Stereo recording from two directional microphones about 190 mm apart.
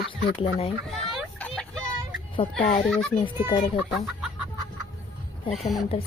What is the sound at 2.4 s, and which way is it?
Speech, 30° left (ahead or behind).